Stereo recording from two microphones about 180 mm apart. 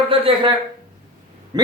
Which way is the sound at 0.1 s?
30° right (ahead or behind).